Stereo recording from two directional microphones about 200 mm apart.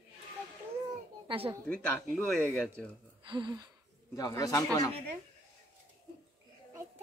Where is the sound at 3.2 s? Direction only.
25° right (ahead or behind).